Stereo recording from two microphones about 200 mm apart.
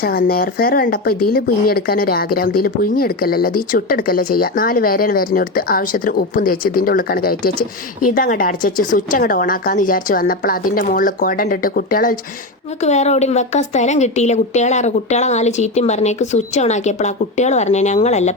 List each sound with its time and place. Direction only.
0.0 s speech: 50° left (ahead or behind)
12.8 s a woman's voice: 35° left (ahead or behind)